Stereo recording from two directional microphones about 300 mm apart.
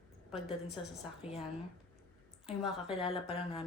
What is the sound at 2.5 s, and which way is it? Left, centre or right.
Speech, centre.